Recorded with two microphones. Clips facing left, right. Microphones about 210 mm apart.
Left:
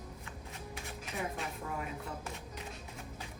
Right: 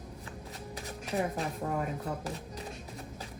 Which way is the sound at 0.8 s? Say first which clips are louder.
Right 8 dB; 35° right (ahead or behind).